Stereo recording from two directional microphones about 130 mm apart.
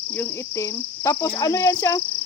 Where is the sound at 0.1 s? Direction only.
15° left (ahead or behind).